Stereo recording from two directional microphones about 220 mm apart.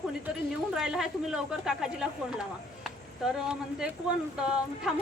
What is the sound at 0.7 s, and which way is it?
A woman's voice, centre (ahead or behind).